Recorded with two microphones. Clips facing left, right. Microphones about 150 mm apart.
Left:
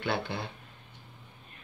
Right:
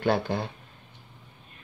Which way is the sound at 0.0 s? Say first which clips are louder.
Right 7 dB; 40° right (ahead or behind).